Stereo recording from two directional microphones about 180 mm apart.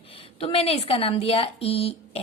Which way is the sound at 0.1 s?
30° left (ahead or behind).